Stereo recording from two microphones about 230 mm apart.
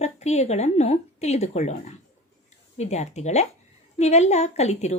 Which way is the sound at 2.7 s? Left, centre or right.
Left.